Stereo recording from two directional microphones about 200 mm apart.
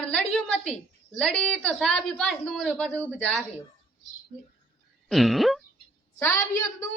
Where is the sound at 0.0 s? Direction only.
5° left (ahead or behind).